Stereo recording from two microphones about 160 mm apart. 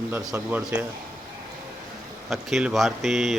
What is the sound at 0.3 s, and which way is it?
Speech, 10° right (ahead or behind).